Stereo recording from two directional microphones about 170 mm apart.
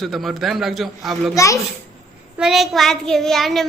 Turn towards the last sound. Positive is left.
turn(degrees=0)  # may be behind; listen again after turning